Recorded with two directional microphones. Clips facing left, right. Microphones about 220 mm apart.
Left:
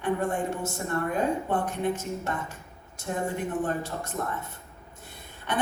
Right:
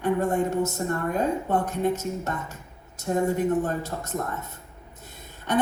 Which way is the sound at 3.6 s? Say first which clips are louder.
Right 1 dB; 40° right (ahead or behind).